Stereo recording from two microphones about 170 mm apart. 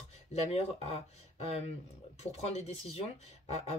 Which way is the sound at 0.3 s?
40° left (ahead or behind).